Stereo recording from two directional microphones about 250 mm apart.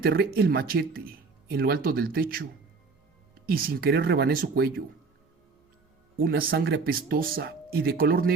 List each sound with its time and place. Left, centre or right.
0.0 s speech: right
6.1 s speech: right